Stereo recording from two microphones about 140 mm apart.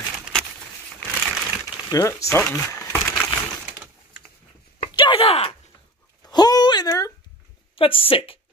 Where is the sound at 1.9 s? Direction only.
25° left (ahead or behind).